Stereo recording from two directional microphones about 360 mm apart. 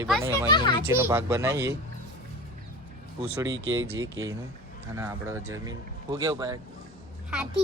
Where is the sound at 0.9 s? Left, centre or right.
Centre.